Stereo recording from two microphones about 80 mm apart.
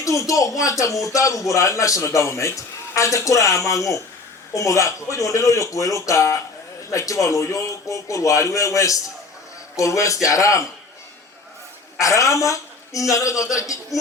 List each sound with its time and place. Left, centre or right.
0.0 s a man's voice: left
11.9 s a woman's voice: left